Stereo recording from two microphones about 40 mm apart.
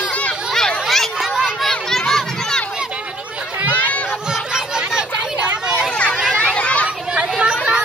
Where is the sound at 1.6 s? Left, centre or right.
Centre.